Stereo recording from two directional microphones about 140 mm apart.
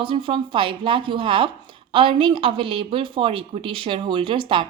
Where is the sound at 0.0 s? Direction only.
40° right (ahead or behind).